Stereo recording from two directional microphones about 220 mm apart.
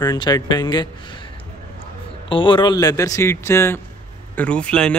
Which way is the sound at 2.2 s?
20° left (ahead or behind).